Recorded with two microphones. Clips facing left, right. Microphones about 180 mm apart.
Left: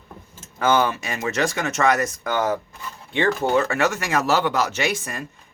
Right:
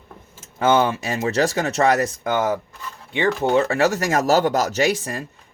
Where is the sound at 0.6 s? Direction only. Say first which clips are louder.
Right 2 dB; 25° right (ahead or behind).